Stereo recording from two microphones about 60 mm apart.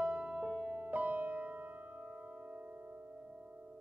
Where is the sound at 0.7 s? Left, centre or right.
Right.